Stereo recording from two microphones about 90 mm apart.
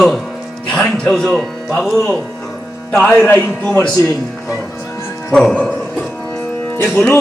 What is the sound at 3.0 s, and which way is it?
Speech, 15° left (ahead or behind).